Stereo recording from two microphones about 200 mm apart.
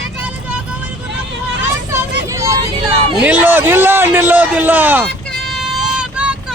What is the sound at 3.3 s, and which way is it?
A man's voice, 10° right (ahead or behind).